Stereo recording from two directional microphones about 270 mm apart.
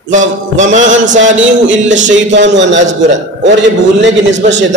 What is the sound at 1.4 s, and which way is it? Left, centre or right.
A man's voice, right.